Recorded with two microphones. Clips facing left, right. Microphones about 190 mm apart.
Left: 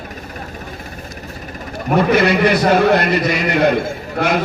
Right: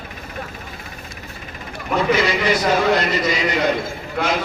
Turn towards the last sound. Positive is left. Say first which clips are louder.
# left 4 dB
turn(degrees=60)  # may be behind; listen again after turning